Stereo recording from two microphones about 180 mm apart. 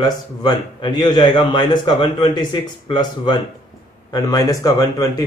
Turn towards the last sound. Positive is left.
turn(degrees=20)  # may be behind; listen again after turning